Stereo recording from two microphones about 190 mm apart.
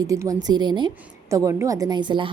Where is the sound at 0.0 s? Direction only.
20° right (ahead or behind).